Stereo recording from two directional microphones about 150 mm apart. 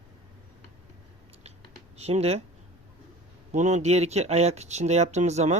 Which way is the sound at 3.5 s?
50° right (ahead or behind).